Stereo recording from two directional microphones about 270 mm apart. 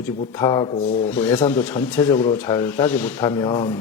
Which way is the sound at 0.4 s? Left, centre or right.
Centre.